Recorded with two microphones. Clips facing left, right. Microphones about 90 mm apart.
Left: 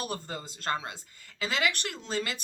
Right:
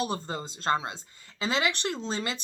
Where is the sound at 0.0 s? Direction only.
25° right (ahead or behind).